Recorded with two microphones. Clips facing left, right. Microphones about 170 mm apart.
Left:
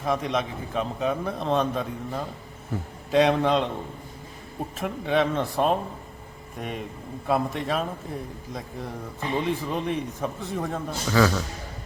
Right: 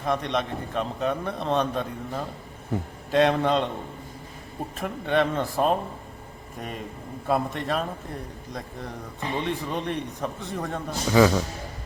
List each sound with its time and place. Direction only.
0.0 s a man's voice: centre (ahead or behind)
4.8 s a man's voice: centre (ahead or behind)
11.1 s speech: 15° right (ahead or behind)